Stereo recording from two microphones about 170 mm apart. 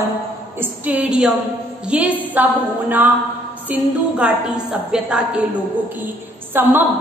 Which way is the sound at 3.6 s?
5° right (ahead or behind).